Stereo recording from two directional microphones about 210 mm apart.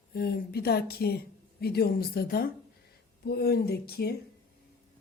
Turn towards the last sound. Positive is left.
turn(degrees=50)  # may be behind; listen again after turning